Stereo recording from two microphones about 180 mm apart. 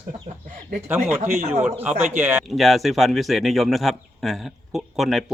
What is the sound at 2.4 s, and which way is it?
Speech, centre (ahead or behind).